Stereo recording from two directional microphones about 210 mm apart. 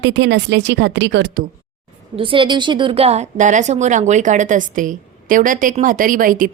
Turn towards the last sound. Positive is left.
turn(degrees=-40)  # may be behind; listen again after turning